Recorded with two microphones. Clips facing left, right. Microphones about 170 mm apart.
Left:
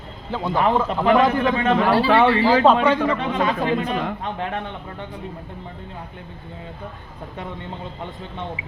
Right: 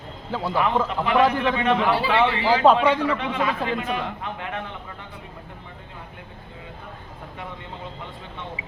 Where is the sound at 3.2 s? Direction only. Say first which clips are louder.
Left 3 dB; 35° left (ahead or behind).